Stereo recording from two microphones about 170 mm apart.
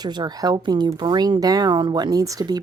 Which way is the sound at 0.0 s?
25° right (ahead or behind).